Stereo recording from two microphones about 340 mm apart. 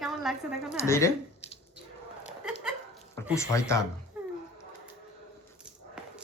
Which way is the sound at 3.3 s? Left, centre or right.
Centre.